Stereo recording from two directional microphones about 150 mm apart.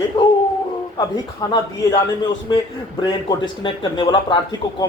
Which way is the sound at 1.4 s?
25° left (ahead or behind).